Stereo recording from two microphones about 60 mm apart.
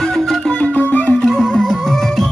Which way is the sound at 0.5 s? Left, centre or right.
Centre.